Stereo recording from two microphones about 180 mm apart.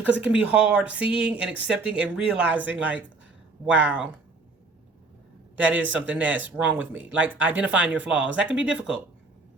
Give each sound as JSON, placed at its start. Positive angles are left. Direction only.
{"t": 0.2, "sound": "speech", "side_deg": -5}
{"t": 5.5, "sound": "speech", "side_deg": -10}